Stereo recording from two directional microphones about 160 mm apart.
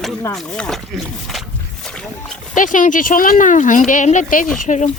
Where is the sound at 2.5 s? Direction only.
55° left (ahead or behind).